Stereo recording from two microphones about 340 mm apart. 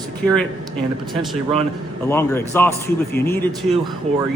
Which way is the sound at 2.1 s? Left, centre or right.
Centre.